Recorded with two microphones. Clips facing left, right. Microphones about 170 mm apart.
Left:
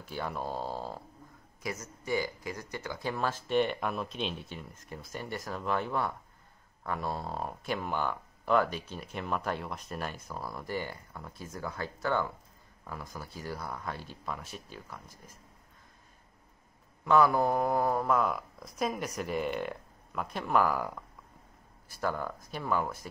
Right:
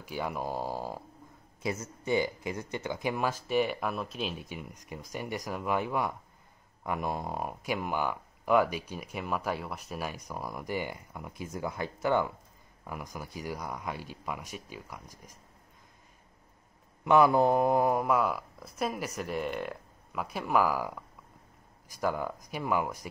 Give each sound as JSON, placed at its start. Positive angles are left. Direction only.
{"t": 0.0, "sound": "speech", "side_deg": -10}
{"t": 1.6, "sound": "speech", "side_deg": -25}
{"t": 17.0, "sound": "speech", "side_deg": -20}